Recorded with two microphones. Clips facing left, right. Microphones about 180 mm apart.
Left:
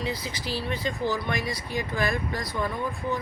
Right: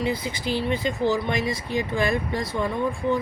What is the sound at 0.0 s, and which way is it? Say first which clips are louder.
Speech: right 5 dB; 25° right (ahead or behind).